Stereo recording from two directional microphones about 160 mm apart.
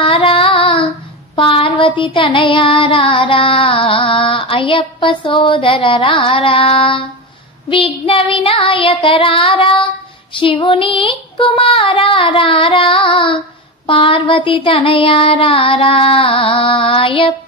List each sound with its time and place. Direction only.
0.0 s child singing: 35° left (ahead or behind)